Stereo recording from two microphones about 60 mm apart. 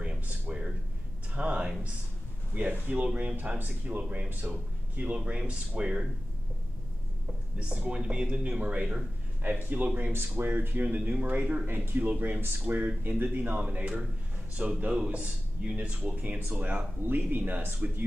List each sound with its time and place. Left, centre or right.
0.0 s a sound: centre
1.3 s speech: centre
7.5 s speech: centre
9.4 s speech: right